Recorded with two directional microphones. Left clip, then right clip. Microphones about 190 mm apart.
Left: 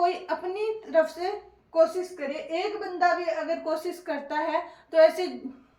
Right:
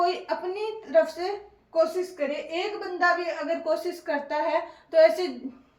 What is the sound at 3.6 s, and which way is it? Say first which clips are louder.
A woman's voice: right 2 dB; 15° left (ahead or behind).